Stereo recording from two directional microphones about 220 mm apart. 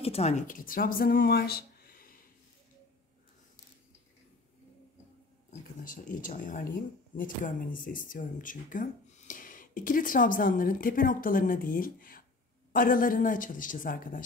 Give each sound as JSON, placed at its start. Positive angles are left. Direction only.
{"t": 0.0, "sound": "speech", "side_deg": 30}
{"t": 5.9, "sound": "speech", "side_deg": 35}